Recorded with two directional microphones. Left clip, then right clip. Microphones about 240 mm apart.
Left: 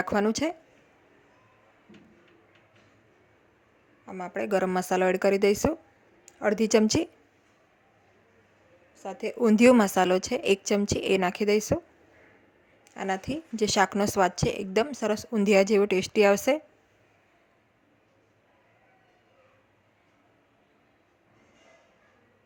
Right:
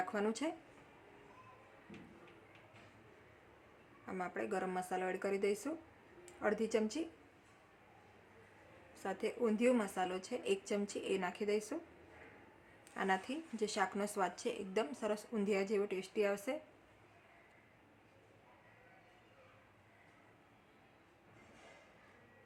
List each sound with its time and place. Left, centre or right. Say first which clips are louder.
0.0 s speech: left 12 dB; left
4.0 s a man's voice: left 6 dB; centre
4.4 s speech: left 15 dB; left
9.0 s a woman's voice: left 5 dB; centre
9.4 s speech: left 15 dB; left
12.9 s speech: left 7 dB; left